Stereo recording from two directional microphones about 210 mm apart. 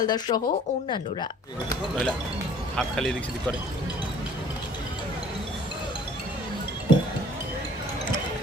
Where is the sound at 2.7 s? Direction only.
5° left (ahead or behind).